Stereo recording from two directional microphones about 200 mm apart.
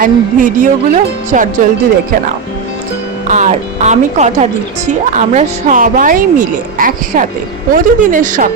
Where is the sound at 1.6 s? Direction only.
40° right (ahead or behind).